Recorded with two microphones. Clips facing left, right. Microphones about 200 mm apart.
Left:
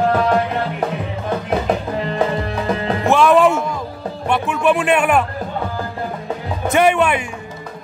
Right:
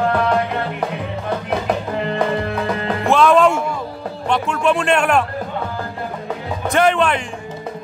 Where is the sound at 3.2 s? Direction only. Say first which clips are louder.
Even; 5° left (ahead or behind).